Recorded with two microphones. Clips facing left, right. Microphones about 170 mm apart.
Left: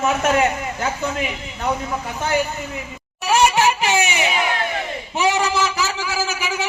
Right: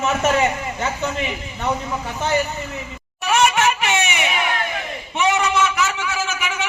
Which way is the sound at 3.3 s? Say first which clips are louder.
Left 1 dB; 35° left (ahead or behind).